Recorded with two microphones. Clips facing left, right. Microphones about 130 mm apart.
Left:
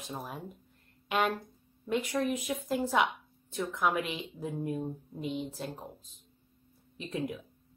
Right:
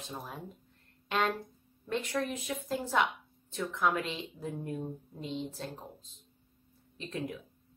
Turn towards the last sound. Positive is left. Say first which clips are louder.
# left 3 dB
turn(degrees=15)  # may be behind; listen again after turning